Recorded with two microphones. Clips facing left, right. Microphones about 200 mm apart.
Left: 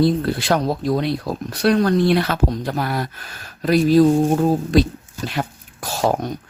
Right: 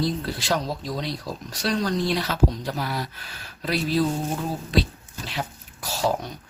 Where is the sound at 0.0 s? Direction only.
60° left (ahead or behind).